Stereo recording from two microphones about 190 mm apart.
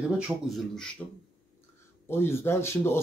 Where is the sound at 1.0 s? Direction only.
10° left (ahead or behind).